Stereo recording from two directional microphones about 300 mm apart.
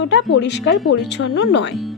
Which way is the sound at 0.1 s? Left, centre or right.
Left.